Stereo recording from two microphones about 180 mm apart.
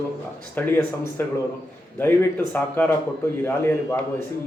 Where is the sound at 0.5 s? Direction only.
10° left (ahead or behind).